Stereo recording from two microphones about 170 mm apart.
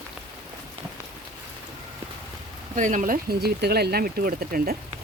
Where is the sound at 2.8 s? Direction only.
50° right (ahead or behind).